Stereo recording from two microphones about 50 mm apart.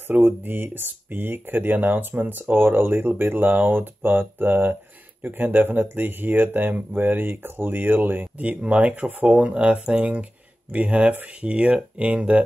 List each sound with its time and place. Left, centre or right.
0.1 s speech: right